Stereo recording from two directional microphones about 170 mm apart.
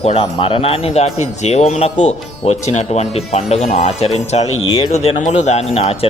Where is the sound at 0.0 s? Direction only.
35° left (ahead or behind).